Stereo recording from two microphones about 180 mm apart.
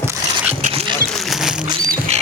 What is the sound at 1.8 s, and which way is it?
Rodents, 45° right (ahead or behind).